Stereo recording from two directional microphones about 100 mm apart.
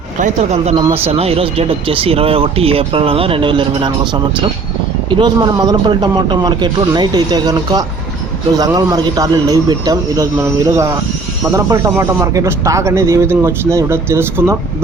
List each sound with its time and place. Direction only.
0.5 s a man's voice: 90° right; by 14.5 s 25° right (ahead or behind)